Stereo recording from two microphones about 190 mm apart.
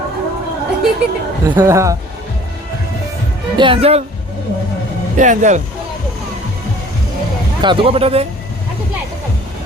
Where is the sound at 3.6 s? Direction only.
30° right (ahead or behind).